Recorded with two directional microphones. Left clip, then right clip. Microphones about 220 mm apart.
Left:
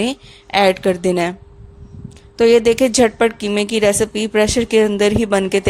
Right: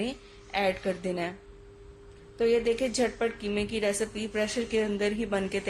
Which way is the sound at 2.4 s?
40° left (ahead or behind).